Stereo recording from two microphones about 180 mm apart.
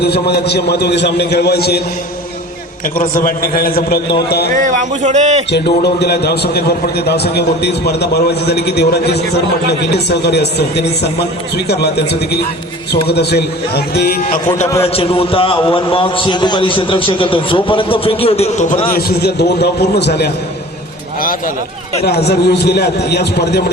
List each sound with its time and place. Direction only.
0.0 s a man's voice: 65° left (ahead or behind)
3.0 s a man's voice: 50° left (ahead or behind)
4.5 s a man's voice: 45° right (ahead or behind)
5.5 s a man's voice: 65° left (ahead or behind); by 14.7 s 45° left (ahead or behind)
14.8 s a man's voice: 30° left (ahead or behind)
18.9 s a man's voice: 60° left (ahead or behind)
21.2 s speech: 50° left (ahead or behind)
22.0 s a man's voice: 65° left (ahead or behind)